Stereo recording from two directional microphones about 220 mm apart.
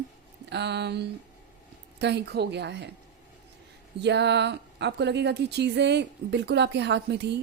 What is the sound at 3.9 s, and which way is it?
Speech, 50° right (ahead or behind).